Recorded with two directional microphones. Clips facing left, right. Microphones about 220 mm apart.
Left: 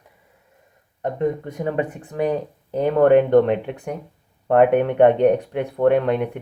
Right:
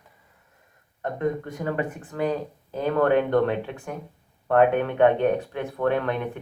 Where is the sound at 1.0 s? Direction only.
15° left (ahead or behind).